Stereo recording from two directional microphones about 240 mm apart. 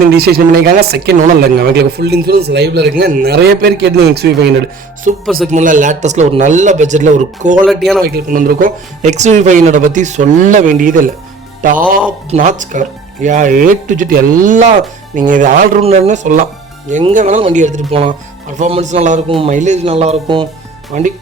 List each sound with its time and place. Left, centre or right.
0.1 s speech: right
5.5 s speech: right
7.5 s speech: centre
8.0 s speech: right
20.9 s speech: right